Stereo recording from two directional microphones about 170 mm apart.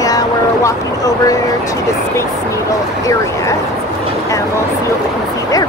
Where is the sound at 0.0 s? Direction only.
20° left (ahead or behind).